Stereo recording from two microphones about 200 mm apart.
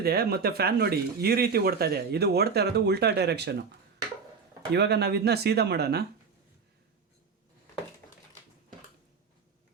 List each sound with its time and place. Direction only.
0.0 s speech: 50° right (ahead or behind)
4.7 s speech: 55° right (ahead or behind)